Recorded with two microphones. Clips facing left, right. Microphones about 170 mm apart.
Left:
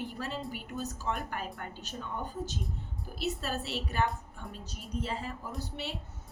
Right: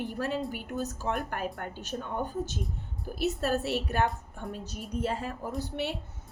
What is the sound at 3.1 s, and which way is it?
A woman's voice, 50° right (ahead or behind).